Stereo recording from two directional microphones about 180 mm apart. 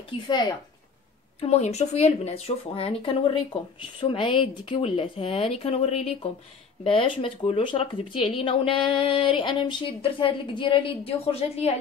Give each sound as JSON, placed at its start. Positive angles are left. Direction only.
{"t": 0.3, "sound": "speech", "side_deg": 25}
{"t": 1.4, "sound": "a woman's voice", "side_deg": 35}